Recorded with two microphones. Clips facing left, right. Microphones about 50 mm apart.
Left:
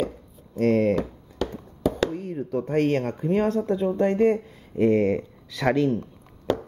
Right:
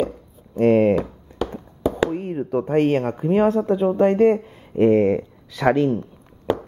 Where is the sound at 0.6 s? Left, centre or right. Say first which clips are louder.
Right 5 dB; right.